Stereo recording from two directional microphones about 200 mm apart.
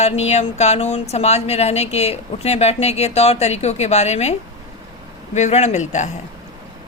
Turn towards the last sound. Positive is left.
turn(degrees=35)  # may be behind; listen again after turning